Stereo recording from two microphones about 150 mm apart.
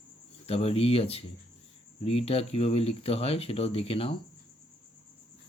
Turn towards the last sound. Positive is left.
turn(degrees=40)  # may be behind; listen again after turning